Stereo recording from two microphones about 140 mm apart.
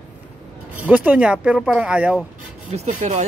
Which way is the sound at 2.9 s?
55° right (ahead or behind).